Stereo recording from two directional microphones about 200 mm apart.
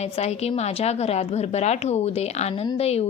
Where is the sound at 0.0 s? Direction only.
30° left (ahead or behind).